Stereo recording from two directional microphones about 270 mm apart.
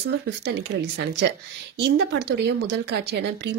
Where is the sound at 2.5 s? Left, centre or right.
Right.